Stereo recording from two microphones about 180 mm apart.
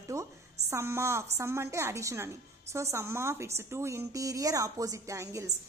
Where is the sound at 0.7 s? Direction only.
15° right (ahead or behind).